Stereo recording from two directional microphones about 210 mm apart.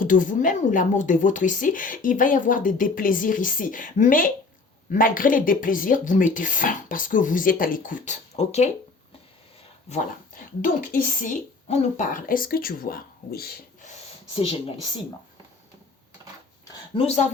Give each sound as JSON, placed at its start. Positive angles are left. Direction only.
{"t": 0.0, "sound": "speech", "side_deg": 40}
{"t": 10.6, "sound": "a woman's voice", "side_deg": 45}
{"t": 17.0, "sound": "speech", "side_deg": 30}